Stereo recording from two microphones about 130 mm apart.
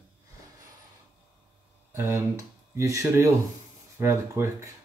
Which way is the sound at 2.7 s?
20° right (ahead or behind).